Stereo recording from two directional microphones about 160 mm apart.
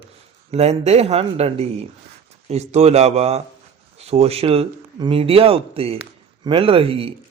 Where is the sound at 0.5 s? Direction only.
40° right (ahead or behind).